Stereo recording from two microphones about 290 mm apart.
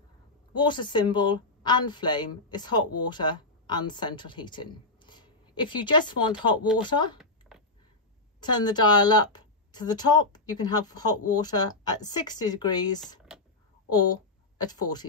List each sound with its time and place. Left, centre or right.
0.6 s a woman's voice: centre
7.2 s a sound: centre
8.4 s a woman's voice: centre